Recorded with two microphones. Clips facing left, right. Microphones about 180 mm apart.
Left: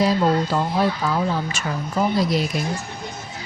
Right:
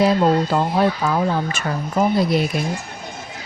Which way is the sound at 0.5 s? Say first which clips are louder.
Right 3 dB; 55° right (ahead or behind).